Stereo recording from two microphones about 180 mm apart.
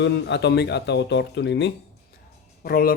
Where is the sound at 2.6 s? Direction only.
55° left (ahead or behind).